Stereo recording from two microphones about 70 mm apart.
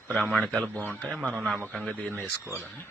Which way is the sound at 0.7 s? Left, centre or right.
Left.